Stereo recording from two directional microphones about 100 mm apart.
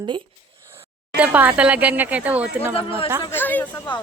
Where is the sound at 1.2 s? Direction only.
15° right (ahead or behind).